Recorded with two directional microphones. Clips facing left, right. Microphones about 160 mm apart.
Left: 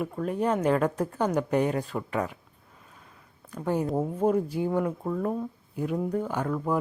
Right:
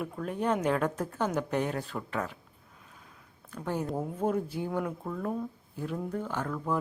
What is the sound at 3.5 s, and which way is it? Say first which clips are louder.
Speech: left 5 dB; 5° left (ahead or behind).